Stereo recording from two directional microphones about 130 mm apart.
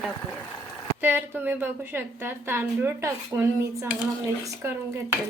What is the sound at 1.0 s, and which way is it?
A woman's voice, 15° right (ahead or behind).